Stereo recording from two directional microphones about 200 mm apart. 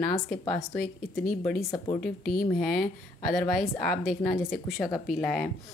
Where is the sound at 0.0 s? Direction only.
5° left (ahead or behind).